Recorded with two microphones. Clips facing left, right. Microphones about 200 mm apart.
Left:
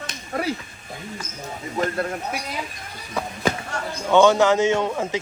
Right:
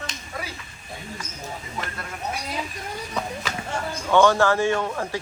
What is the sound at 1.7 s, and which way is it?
Speech, 40° left (ahead or behind).